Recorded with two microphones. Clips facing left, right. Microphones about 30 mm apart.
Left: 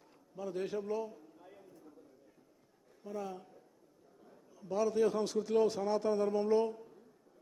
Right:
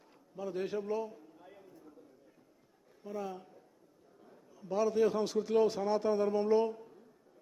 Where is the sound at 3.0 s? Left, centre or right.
Centre.